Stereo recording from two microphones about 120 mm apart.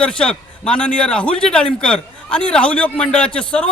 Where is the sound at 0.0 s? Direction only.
10° left (ahead or behind).